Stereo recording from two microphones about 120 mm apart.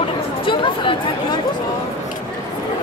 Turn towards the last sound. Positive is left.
turn(degrees=45)  # may be behind; listen again after turning